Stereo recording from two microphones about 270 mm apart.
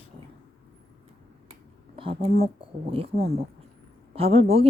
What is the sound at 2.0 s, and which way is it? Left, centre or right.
Speech, centre.